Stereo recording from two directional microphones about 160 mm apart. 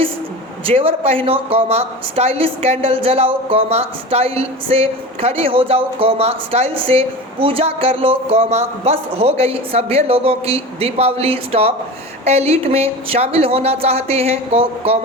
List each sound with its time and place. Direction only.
0.6 s speech: 35° right (ahead or behind)